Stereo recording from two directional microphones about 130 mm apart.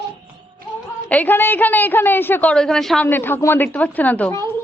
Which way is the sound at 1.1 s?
15° left (ahead or behind).